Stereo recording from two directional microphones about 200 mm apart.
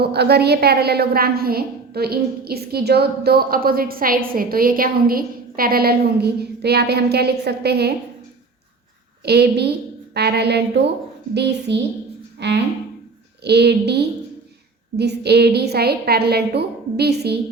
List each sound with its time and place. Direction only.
0.0 s a woman's voice: 55° right (ahead or behind)
9.2 s a woman's voice: 55° right (ahead or behind)